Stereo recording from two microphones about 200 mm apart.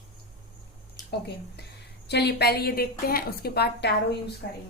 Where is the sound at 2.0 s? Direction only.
55° left (ahead or behind).